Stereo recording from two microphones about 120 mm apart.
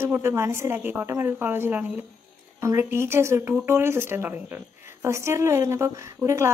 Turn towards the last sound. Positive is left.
turn(degrees=-25)  # may be behind; listen again after turning